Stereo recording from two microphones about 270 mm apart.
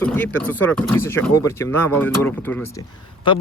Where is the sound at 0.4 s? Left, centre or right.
Centre.